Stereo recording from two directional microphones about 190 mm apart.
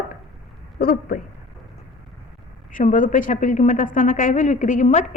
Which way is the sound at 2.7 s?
45° left (ahead or behind).